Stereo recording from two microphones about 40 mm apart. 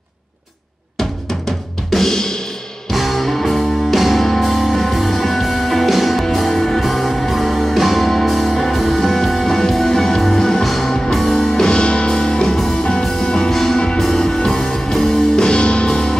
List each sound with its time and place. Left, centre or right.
1.9 s music: centre
2.9 s music: centre
11.5 s music: centre